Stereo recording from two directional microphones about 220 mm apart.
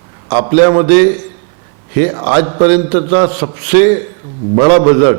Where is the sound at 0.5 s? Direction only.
15° right (ahead or behind).